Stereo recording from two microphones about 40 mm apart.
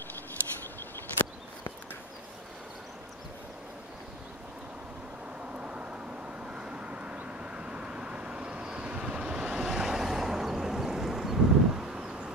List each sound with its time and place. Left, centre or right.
5.4 s vehicle: right
9.7 s vehicle: centre